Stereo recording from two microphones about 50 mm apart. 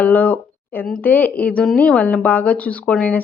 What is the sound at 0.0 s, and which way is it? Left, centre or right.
Speech, left.